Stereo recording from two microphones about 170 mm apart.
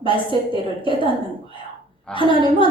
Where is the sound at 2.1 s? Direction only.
30° left (ahead or behind).